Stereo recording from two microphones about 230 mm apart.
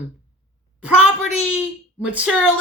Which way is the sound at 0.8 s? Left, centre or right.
Centre.